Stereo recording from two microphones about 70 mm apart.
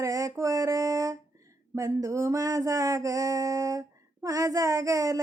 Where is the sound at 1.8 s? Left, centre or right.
Right.